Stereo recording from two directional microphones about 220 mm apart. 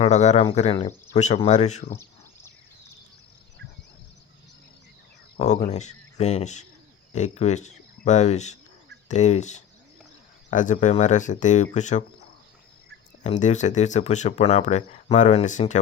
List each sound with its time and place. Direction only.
0.0 s speech: 30° left (ahead or behind)
1.9 s a sound: 10° left (ahead or behind)
5.4 s speech: 30° left (ahead or behind)
13.2 s speech: 30° left (ahead or behind)